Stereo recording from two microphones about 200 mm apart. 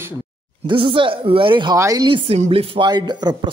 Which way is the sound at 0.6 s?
25° right (ahead or behind).